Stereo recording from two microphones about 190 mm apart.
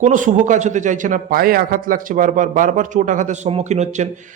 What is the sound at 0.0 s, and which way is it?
A man's voice, 40° right (ahead or behind).